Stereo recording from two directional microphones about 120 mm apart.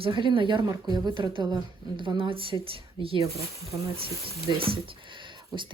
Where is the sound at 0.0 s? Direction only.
45° right (ahead or behind).